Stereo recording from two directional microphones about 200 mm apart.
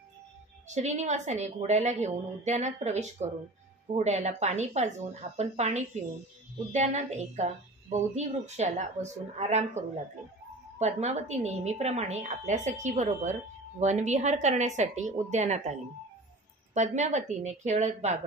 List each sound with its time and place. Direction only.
0.7 s a woman's voice: 35° right (ahead or behind)
16.7 s a woman's voice: 35° right (ahead or behind)